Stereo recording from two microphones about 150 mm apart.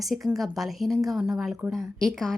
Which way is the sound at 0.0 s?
Centre (ahead or behind).